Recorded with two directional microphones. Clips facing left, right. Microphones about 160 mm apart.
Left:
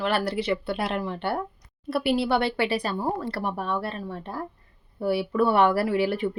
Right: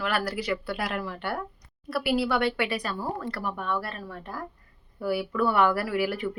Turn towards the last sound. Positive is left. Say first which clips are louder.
# left 4 dB
turn(degrees=25)  # may be behind; listen again after turning